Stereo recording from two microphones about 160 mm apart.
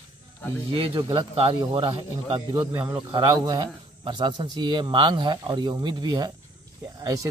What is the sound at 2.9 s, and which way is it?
Speech, 25° right (ahead or behind).